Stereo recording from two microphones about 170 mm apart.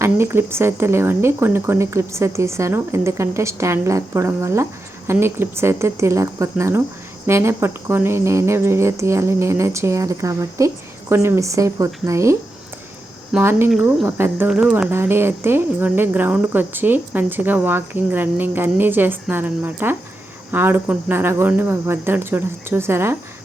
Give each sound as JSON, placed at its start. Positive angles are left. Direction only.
{"t": 0.0, "sound": "speech", "side_deg": -15}